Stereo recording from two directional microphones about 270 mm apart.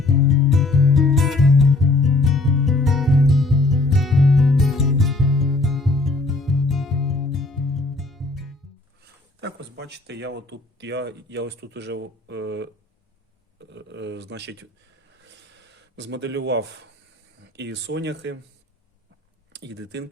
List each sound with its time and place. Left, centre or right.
0.0 s music: centre
9.4 s speech: right
15.1 s a sound: right
17.4 s speech: right
19.5 s speech: right